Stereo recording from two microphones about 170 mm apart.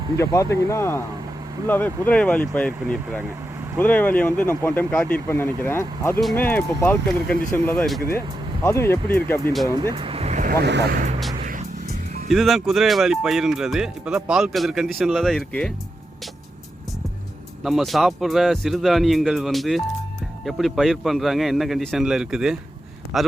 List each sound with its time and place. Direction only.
0.2 s speech: 15° left (ahead or behind)
9.8 s vehicle: 30° right (ahead or behind)
10.5 s speech: 80° right
11.4 s music: 50° right (ahead or behind)
12.3 s speech: centre (ahead or behind)
17.6 s speech: centre (ahead or behind)